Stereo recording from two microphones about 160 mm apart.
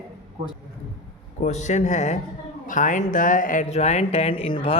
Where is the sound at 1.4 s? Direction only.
45° left (ahead or behind).